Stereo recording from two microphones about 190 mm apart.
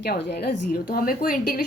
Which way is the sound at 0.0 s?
55° left (ahead or behind).